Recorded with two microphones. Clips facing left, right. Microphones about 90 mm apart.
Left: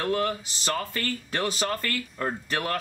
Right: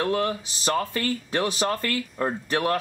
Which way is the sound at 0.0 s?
25° right (ahead or behind).